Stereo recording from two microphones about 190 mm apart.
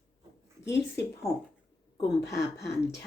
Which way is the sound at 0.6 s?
65° left (ahead or behind).